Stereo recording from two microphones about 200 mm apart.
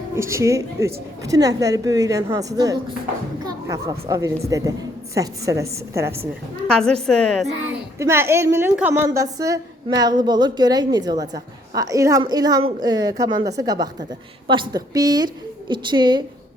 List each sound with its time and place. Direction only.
0.2 s a woman's voice: 15° right (ahead or behind)
6.7 s speech: 5° left (ahead or behind)
7.9 s a woman's voice: 15° right (ahead or behind)